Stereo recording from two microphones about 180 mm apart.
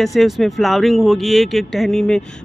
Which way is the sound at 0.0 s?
Centre (ahead or behind).